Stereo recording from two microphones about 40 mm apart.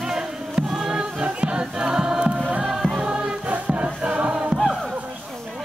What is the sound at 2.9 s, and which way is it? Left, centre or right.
Music, right.